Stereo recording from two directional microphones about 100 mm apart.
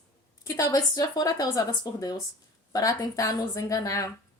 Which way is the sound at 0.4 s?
35° left (ahead or behind).